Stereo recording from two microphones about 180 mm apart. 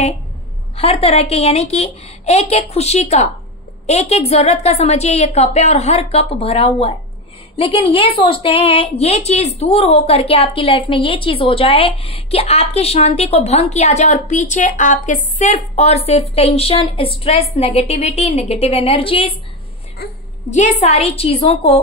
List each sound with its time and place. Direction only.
0.7 s a woman's voice: 35° left (ahead or behind)
20.4 s a woman's voice: 40° left (ahead or behind)